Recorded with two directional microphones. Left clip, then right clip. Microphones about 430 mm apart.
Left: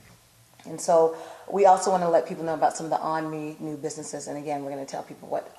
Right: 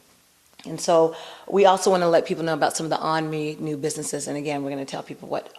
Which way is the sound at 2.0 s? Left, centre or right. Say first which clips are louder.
Right 3 dB; right.